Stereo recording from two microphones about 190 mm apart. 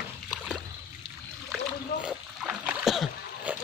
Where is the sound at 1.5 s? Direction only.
5° right (ahead or behind).